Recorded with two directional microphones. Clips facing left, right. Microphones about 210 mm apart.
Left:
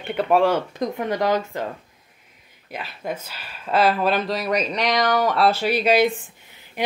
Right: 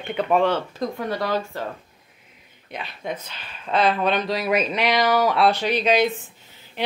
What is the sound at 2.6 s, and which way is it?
Speech, 5° left (ahead or behind).